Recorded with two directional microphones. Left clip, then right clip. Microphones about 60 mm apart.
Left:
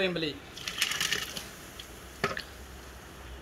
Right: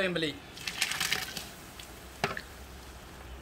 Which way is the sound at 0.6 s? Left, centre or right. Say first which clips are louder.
Left 2 dB; left.